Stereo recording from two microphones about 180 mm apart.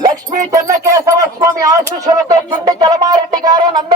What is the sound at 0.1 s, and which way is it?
Music, 45° right (ahead or behind).